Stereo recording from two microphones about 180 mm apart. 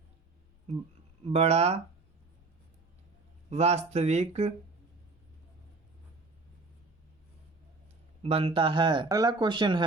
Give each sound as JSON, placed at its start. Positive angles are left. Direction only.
{"t": 1.2, "sound": "speech", "side_deg": -35}
{"t": 3.5, "sound": "speech", "side_deg": -35}
{"t": 8.2, "sound": "speech", "side_deg": -30}